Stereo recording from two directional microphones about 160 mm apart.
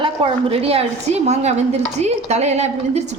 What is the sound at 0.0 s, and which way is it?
A woman's voice, 35° right (ahead or behind).